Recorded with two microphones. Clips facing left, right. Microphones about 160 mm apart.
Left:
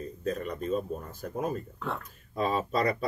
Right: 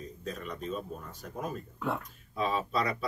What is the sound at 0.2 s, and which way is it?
Speech, 45° left (ahead or behind).